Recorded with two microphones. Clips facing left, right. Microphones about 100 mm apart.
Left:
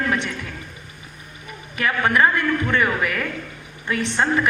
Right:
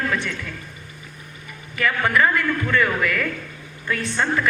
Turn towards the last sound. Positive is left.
turn(degrees=20)  # may be behind; listen again after turning